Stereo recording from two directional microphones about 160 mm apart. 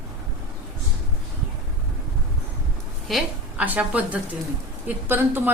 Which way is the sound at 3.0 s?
Centre (ahead or behind).